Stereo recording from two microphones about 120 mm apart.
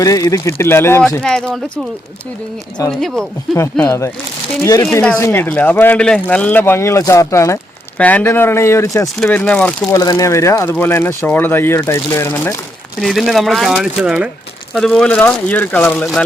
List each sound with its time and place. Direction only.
0.0 s speech: 30° left (ahead or behind)
1.2 s speech: 5° left (ahead or behind)
2.8 s speech: 25° left (ahead or behind)
7.9 s speech: 15° left (ahead or behind)
9.2 s speech: 10° left (ahead or behind)
9.8 s speech: 30° left (ahead or behind)
13.0 s speech: centre (ahead or behind)
14.7 s speech: 5° left (ahead or behind)